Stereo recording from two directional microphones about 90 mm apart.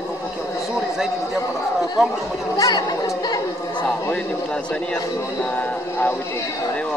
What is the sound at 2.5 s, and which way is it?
Speech, 50° left (ahead or behind).